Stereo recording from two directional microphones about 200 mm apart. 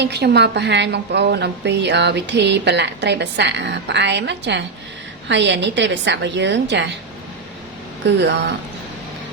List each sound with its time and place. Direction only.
0.0 s a woman's voice: 55° right (ahead or behind)
8.0 s a woman's voice: 60° right (ahead or behind)